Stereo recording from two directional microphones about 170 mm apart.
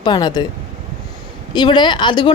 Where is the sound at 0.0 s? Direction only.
25° left (ahead or behind).